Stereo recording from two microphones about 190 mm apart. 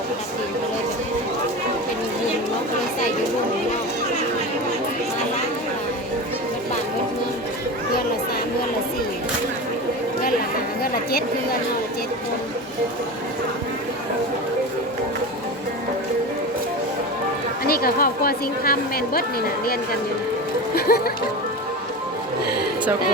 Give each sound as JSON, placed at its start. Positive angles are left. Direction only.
{"t": 17.7, "sound": "a woman's voice", "side_deg": 50}